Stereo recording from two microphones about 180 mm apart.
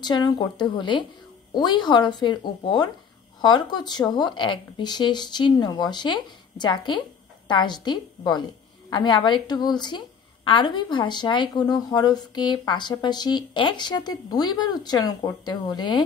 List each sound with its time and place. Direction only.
0.0 s a woman's voice: 25° left (ahead or behind)